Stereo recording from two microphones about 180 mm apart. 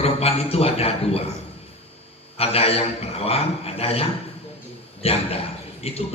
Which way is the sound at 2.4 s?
35° left (ahead or behind).